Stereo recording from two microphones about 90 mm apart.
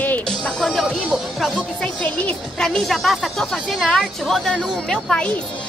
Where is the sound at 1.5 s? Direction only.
10° left (ahead or behind).